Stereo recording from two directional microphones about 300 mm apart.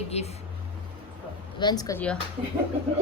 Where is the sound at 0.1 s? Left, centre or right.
Left.